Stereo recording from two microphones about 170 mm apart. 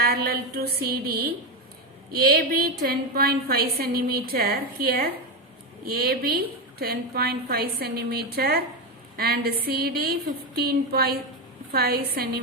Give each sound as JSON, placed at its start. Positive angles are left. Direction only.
{"t": 0.0, "sound": "a woman's voice", "side_deg": -60}